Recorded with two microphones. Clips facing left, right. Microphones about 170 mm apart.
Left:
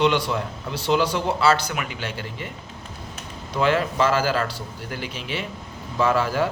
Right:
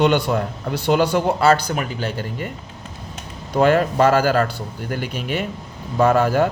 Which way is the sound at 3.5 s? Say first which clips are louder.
Right 5 dB; 50° right (ahead or behind).